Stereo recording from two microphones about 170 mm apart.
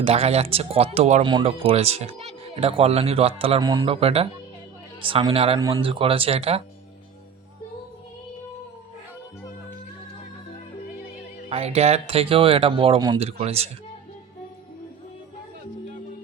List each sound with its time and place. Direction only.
0.0 s speech: 35° right (ahead or behind)
1.2 s speech: 30° right (ahead or behind)
3.7 s speech: 25° right (ahead or behind)
4.0 s speech: 35° right (ahead or behind)
5.5 s speech: 20° right (ahead or behind)
5.8 s speech: 30° right (ahead or behind)
11.4 s speech: 35° right (ahead or behind)